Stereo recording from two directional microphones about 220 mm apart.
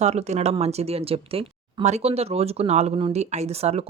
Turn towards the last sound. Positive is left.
turn(degrees=-30)  # may be behind; listen again after turning